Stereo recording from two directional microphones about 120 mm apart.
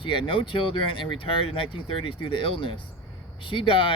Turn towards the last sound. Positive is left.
turn(degrees=45)  # may be behind; listen again after turning